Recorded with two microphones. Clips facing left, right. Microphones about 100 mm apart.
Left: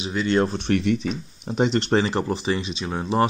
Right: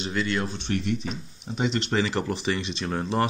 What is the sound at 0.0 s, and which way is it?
Speech, 20° left (ahead or behind).